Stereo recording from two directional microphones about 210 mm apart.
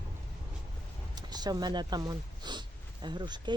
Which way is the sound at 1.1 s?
20° right (ahead or behind).